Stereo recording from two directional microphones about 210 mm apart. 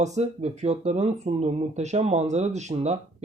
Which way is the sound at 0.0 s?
35° right (ahead or behind).